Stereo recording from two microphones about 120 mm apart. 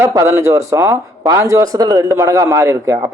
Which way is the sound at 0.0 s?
25° right (ahead or behind).